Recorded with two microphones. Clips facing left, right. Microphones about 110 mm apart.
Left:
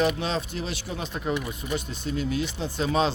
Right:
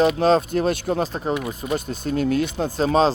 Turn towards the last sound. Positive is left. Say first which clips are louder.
# right 6 dB
turn(degrees=-35)  # may be behind; listen again after turning